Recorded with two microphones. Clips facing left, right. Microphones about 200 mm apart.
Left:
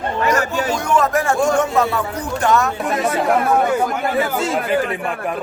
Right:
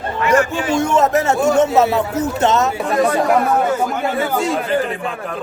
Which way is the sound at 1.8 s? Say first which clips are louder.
Right 5 dB; 25° right (ahead or behind).